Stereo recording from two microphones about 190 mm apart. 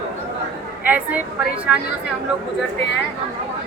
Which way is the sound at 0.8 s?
10° right (ahead or behind).